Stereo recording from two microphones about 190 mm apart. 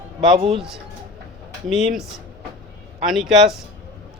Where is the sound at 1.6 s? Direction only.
Centre (ahead or behind).